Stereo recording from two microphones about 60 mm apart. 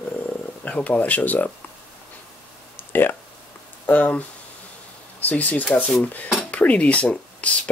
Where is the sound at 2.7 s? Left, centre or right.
Left.